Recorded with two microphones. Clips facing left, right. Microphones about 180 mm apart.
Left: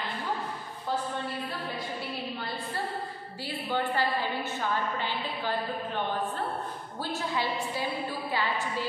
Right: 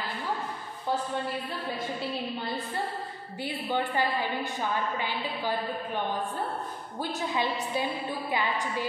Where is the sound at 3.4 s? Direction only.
15° right (ahead or behind).